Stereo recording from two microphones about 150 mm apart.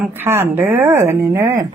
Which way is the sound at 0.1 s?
15° right (ahead or behind).